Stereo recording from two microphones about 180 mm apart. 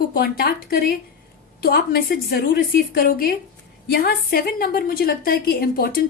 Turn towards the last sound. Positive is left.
turn(degrees=55)  # may be behind; listen again after turning